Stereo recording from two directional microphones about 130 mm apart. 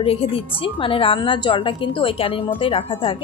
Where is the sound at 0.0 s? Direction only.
50° left (ahead or behind).